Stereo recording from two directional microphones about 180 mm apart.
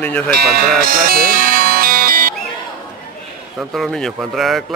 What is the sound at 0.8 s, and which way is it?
Music, 55° right (ahead or behind).